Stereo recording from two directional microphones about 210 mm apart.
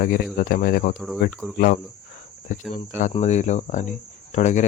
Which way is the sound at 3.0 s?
35° left (ahead or behind).